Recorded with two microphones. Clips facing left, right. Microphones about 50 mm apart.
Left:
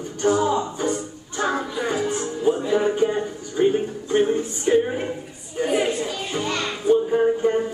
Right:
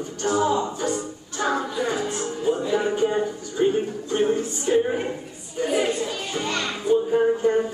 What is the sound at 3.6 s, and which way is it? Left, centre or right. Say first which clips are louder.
Music: left 2 dB; left.